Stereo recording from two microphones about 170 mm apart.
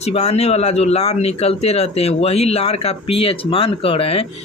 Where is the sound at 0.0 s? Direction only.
40° left (ahead or behind).